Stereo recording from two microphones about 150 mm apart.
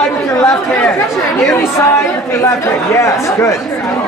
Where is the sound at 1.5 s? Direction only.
15° left (ahead or behind).